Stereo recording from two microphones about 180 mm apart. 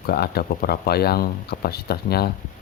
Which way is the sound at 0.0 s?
60° left (ahead or behind).